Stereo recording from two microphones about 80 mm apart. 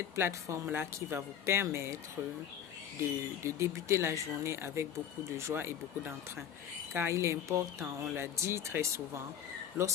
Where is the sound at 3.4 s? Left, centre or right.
Right.